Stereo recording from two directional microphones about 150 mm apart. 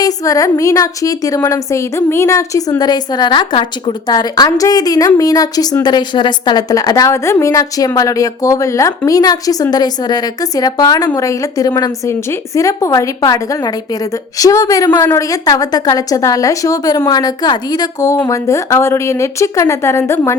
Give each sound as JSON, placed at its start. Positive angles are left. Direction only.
{"t": 0.0, "sound": "a woman's voice", "side_deg": 25}